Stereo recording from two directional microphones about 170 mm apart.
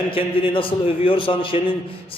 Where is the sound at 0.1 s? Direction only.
30° left (ahead or behind).